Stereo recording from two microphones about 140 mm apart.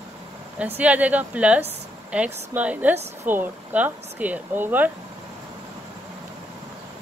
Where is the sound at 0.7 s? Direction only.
10° right (ahead or behind).